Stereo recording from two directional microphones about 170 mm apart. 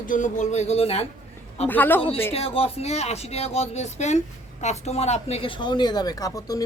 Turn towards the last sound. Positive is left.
turn(degrees=20)  # may be behind; listen again after turning